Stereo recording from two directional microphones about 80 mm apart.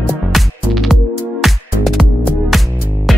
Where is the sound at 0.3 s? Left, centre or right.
Centre.